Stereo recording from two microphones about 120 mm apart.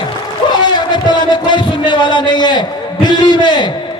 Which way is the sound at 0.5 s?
40° left (ahead or behind).